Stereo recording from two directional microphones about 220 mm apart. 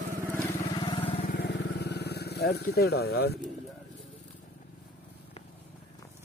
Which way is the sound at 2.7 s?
45° left (ahead or behind).